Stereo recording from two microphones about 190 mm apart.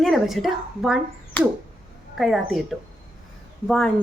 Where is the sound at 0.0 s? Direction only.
Centre (ahead or behind).